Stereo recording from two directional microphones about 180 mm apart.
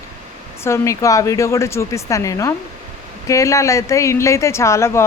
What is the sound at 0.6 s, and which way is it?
Speech, 15° left (ahead or behind).